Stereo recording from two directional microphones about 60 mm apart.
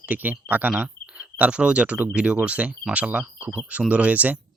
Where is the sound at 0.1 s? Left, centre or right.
Right.